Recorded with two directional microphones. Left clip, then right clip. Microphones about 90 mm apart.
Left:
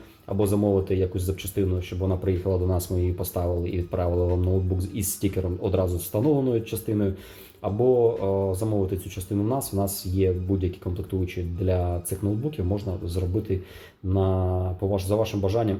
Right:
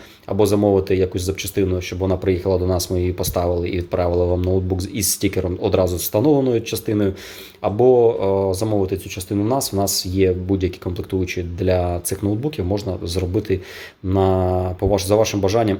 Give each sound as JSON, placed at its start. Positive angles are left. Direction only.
{"t": 0.3, "sound": "speech", "side_deg": -40}
{"t": 2.0, "sound": "speech", "side_deg": -25}
{"t": 13.1, "sound": "speech", "side_deg": -35}
{"t": 14.8, "sound": "speech", "side_deg": -55}